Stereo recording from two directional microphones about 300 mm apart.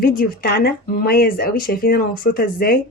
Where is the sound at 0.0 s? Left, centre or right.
Left.